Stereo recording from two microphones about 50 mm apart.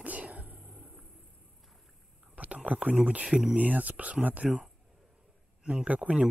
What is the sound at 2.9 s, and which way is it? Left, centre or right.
Speech, right.